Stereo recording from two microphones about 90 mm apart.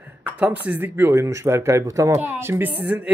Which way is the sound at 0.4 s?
15° right (ahead or behind).